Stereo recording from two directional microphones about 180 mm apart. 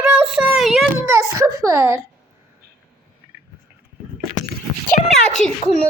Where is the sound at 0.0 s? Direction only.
10° right (ahead or behind).